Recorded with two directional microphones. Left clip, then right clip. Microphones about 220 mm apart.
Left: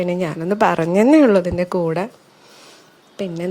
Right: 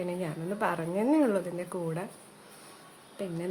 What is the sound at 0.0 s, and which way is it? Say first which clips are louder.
A woman's voice: left 13 dB; 40° left (ahead or behind).